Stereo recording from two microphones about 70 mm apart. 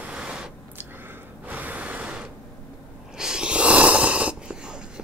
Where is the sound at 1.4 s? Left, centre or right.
Right.